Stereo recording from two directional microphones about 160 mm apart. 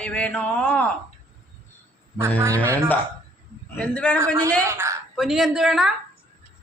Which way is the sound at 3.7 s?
10° left (ahead or behind).